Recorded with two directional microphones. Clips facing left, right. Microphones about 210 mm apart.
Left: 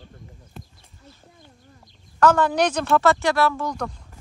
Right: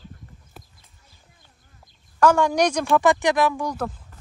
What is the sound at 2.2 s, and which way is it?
Speech, 10° right (ahead or behind).